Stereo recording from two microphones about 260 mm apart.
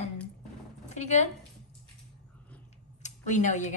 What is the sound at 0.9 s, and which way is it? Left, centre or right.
Speech, left.